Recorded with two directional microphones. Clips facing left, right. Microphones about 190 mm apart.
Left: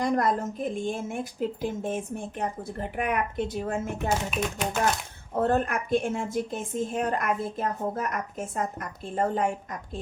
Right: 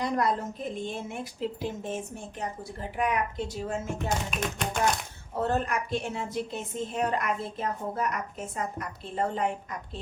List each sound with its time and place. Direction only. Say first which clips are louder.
0.0 s a woman's voice: left 3 dB; 50° left (ahead or behind)
4.3 s speech: left 3 dB; 5° left (ahead or behind)
5.3 s a woman's voice: left 3 dB; 55° left (ahead or behind)